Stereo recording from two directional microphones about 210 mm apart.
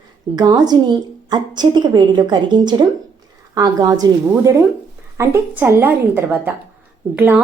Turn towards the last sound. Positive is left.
turn(degrees=-10)  # may be behind; listen again after turning